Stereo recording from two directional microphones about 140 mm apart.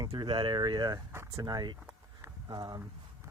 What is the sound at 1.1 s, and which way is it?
Speech, 20° right (ahead or behind).